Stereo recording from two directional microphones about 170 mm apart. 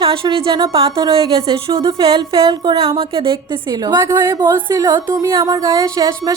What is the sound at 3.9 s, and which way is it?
Speech, 15° right (ahead or behind).